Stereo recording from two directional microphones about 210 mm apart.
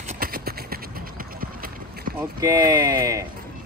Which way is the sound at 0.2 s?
45° right (ahead or behind).